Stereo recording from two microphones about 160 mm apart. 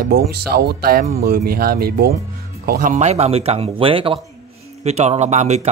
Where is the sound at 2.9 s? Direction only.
45° right (ahead or behind).